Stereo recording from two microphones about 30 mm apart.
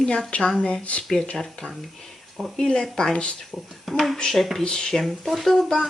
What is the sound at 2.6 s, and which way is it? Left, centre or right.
Speech, left.